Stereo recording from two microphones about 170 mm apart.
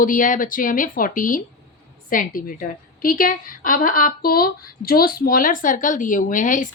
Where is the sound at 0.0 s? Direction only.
50° left (ahead or behind).